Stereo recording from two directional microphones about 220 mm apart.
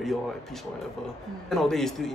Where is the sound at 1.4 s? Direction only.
Centre (ahead or behind).